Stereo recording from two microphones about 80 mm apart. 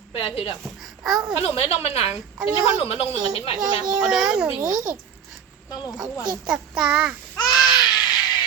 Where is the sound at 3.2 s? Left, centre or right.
Right.